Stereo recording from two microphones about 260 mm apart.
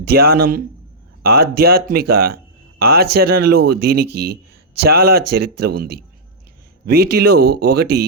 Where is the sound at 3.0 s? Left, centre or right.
Right.